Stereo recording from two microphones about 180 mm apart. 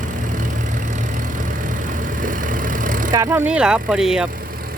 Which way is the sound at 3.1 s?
15° right (ahead or behind).